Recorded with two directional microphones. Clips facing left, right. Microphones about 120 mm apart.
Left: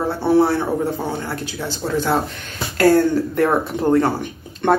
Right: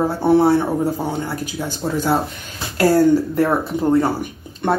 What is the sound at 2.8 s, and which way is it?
Speech, 10° right (ahead or behind).